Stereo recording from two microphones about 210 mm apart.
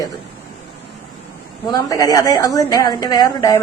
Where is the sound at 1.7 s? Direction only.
15° left (ahead or behind).